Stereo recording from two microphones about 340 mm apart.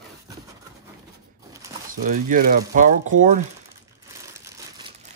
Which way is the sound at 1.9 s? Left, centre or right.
Right.